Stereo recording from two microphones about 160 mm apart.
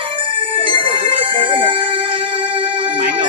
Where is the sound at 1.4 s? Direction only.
30° right (ahead or behind).